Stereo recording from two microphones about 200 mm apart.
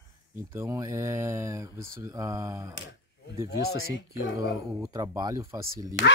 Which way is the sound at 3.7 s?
70° left (ahead or behind).